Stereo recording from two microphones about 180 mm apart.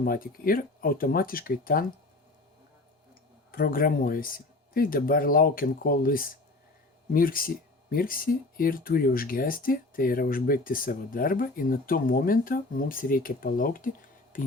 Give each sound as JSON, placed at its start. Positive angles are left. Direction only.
{"t": 0.0, "sound": "speech", "side_deg": 50}
{"t": 3.5, "sound": "speech", "side_deg": 55}